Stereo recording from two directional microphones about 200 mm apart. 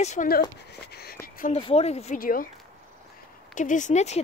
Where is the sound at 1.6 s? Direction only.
30° left (ahead or behind).